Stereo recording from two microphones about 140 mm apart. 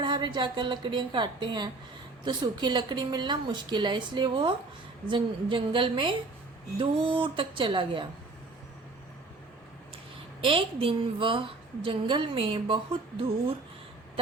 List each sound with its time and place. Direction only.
0.0 s a woman's voice: 35° right (ahead or behind)
10.4 s a woman's voice: 40° right (ahead or behind)